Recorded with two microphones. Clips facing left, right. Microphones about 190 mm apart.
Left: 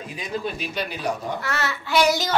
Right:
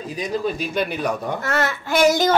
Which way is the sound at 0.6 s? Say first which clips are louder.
Right 6 dB; 50° right (ahead or behind).